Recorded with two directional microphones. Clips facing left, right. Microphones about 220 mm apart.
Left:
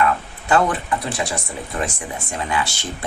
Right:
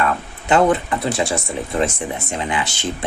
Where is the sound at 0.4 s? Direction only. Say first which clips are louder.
Right 4 dB; 20° right (ahead or behind).